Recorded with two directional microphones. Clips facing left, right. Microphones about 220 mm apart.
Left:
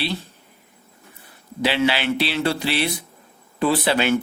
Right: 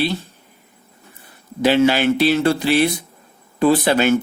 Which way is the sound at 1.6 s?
45° right (ahead or behind).